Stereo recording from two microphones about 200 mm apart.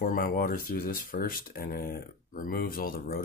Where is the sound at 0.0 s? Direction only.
45° left (ahead or behind).